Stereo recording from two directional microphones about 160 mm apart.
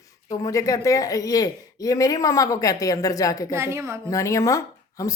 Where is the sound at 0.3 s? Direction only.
20° left (ahead or behind).